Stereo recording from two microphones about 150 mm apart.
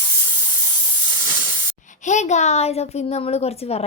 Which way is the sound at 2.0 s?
55° left (ahead or behind).